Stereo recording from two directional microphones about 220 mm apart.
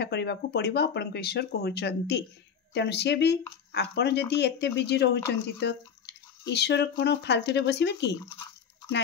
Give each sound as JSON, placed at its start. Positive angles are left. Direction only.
{"t": 0.0, "sound": "speech", "side_deg": 50}